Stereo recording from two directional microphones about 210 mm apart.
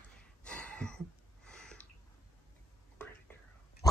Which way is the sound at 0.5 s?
5° left (ahead or behind).